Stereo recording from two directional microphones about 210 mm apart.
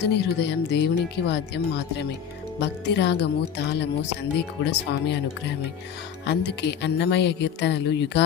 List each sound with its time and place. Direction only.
0.1 s speech: 55° left (ahead or behind)